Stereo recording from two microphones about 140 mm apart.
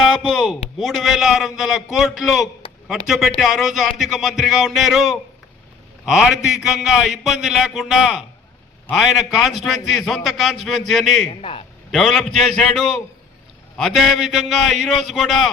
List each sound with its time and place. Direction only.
0.0 s a man's voice: 5° left (ahead or behind)